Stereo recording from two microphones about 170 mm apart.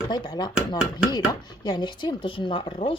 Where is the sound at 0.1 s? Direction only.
25° left (ahead or behind).